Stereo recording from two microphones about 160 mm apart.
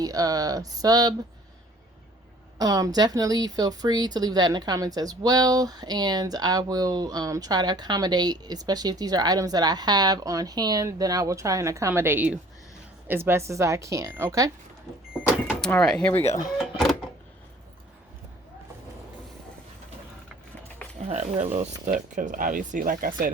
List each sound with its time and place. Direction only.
0.0 s speech: 25° right (ahead or behind)
2.6 s speech: 25° right (ahead or behind)
15.6 s speech: 5° left (ahead or behind)
16.6 s a sound: centre (ahead or behind)
21.1 s speech: 45° right (ahead or behind)